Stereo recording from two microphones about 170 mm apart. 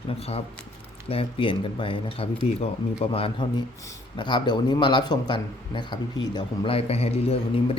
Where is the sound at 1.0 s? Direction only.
30° left (ahead or behind).